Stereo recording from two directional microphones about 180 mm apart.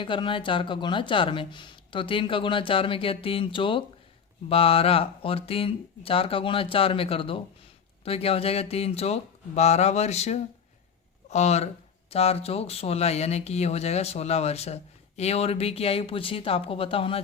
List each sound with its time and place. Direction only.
0.0 s speech: 30° left (ahead or behind)